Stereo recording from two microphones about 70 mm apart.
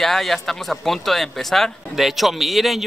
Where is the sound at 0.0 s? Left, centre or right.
Centre.